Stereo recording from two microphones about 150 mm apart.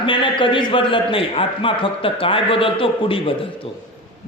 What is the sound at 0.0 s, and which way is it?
A man's voice, 35° left (ahead or behind).